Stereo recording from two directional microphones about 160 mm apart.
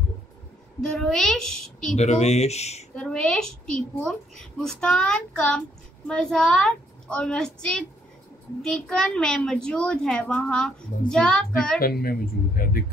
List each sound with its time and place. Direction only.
0.7 s a woman's voice: 5° left (ahead or behind)
2.0 s speech: 45° left (ahead or behind)
3.0 s a woman's voice: 5° left (ahead or behind)
11.8 s speech: 70° left (ahead or behind)